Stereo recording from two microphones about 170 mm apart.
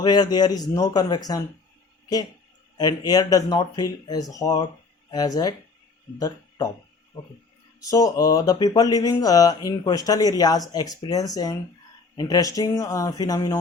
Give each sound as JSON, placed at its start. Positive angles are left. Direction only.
{"t": 0.0, "sound": "speech", "side_deg": 25}
{"t": 2.7, "sound": "speech", "side_deg": 25}
{"t": 7.8, "sound": "speech", "side_deg": 20}